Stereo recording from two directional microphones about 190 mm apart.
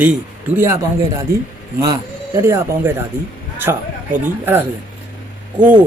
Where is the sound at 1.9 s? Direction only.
15° right (ahead or behind).